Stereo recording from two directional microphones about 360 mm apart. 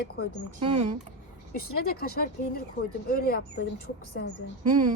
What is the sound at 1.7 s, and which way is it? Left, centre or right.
Speech, left.